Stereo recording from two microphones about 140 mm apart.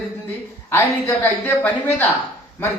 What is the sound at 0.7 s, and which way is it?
A man's voice, 15° left (ahead or behind).